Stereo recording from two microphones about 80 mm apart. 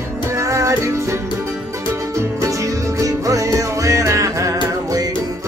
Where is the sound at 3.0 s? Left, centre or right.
Right.